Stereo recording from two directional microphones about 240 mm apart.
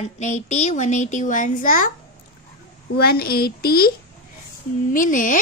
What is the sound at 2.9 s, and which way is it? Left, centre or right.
Speech, left.